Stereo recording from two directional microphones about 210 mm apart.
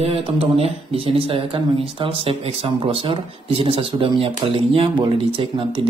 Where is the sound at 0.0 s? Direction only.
30° right (ahead or behind).